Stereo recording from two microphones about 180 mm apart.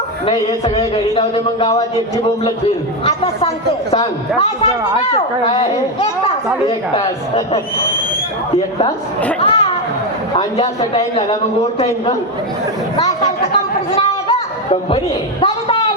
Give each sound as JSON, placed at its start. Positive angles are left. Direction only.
{"t": 0.3, "sound": "a man's voice", "side_deg": 30}
{"t": 3.0, "sound": "a man's voice", "side_deg": 30}
{"t": 9.4, "sound": "chatter", "side_deg": 30}
{"t": 10.3, "sound": "a man's voice", "side_deg": 30}
{"t": 13.9, "sound": "a sound", "side_deg": 30}